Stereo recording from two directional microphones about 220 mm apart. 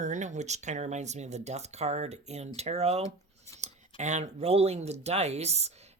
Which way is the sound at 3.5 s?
10° left (ahead or behind).